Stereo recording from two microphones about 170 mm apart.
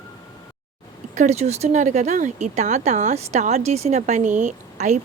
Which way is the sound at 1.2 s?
40° right (ahead or behind).